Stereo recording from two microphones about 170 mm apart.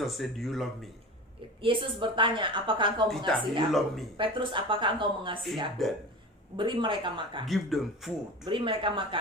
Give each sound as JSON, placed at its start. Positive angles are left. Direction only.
{"t": 0.0, "sound": "speech", "side_deg": 0}
{"t": 1.6, "sound": "a woman's voice", "side_deg": -30}
{"t": 3.7, "sound": "speech", "side_deg": 0}
{"t": 4.2, "sound": "a woman's voice", "side_deg": -30}
{"t": 5.8, "sound": "speech", "side_deg": 0}
{"t": 6.6, "sound": "a woman's voice", "side_deg": -30}
{"t": 7.4, "sound": "speech", "side_deg": 0}
{"t": 8.4, "sound": "a woman's voice", "side_deg": -30}